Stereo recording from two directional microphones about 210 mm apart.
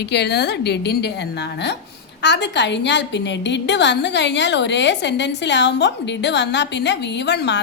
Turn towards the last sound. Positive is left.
turn(degrees=55)  # may be behind; listen again after turning